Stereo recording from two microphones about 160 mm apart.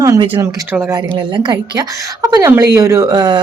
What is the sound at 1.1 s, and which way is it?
A woman's voice, 30° right (ahead or behind).